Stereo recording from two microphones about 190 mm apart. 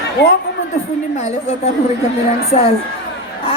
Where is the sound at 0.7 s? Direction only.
35° left (ahead or behind).